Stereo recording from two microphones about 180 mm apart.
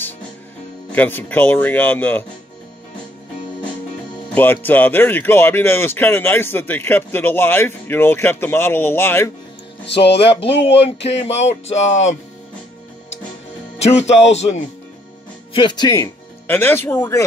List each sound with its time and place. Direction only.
0.9 s speech: 10° left (ahead or behind)
4.3 s speech: 10° left (ahead or behind)
9.8 s speech: 70° left (ahead or behind)
11.6 s music: 90° left
13.7 s speech: 35° left (ahead or behind)
15.5 s speech: 25° left (ahead or behind)